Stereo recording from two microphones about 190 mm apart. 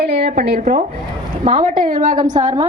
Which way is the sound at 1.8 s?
45° right (ahead or behind).